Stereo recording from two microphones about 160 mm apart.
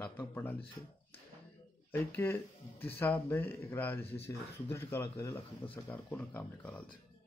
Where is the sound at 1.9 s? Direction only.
10° left (ahead or behind).